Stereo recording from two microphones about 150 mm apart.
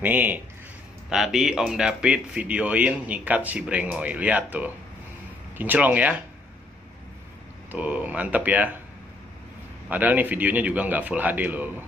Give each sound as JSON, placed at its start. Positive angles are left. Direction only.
{"t": 0.0, "sound": "speech", "side_deg": -10}
{"t": 7.7, "sound": "speech", "side_deg": -10}
{"t": 9.8, "sound": "speech", "side_deg": -10}